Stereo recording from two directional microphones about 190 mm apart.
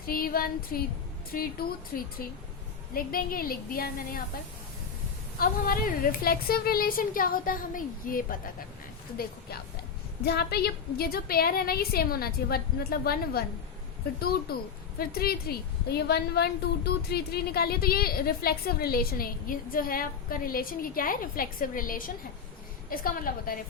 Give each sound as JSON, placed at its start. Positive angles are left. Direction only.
{"t": 0.0, "sound": "a woman's voice", "side_deg": 50}
{"t": 5.4, "sound": "a woman's voice", "side_deg": 50}
{"t": 10.2, "sound": "a woman's voice", "side_deg": 60}
{"t": 14.5, "sound": "a woman's voice", "side_deg": 55}